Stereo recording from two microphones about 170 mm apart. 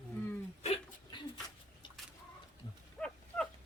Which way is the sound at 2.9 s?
5° left (ahead or behind).